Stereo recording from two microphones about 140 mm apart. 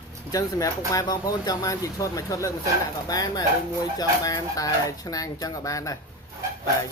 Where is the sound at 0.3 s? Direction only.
25° left (ahead or behind).